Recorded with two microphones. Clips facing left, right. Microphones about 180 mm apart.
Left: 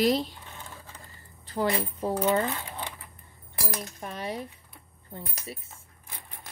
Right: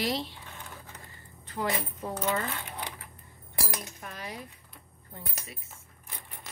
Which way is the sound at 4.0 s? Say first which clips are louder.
Left 7 dB; 30° left (ahead or behind).